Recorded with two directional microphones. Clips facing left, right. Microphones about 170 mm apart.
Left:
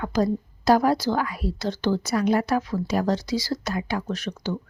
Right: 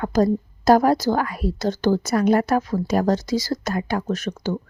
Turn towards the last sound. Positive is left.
turn(degrees=-45)  # may be behind; listen again after turning